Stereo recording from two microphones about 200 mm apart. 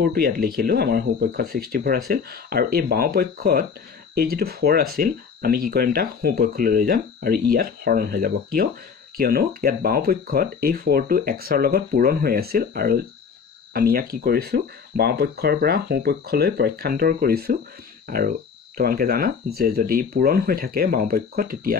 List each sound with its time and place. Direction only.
0.0 s speech: 50° right (ahead or behind)